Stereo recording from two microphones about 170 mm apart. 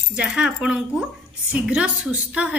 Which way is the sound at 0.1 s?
5° right (ahead or behind).